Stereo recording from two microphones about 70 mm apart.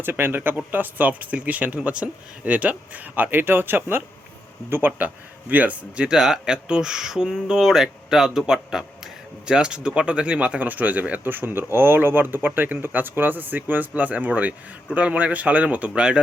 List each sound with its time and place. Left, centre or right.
0.0 s speech: right; by 16.2 s centre